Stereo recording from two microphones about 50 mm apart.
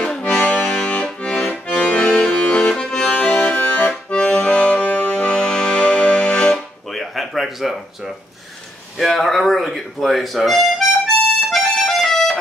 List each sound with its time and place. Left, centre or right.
0.0 s accordion: centre
0.7 s accordion: centre
2.3 s music: left
3.1 s accordion: left
5.1 s music: centre
6.9 s a sound: centre
8.9 s music: centre